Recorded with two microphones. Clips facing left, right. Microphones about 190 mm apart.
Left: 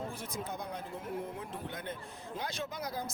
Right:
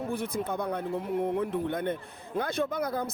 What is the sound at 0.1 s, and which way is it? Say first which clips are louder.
Speech: right 9 dB; 60° right (ahead or behind).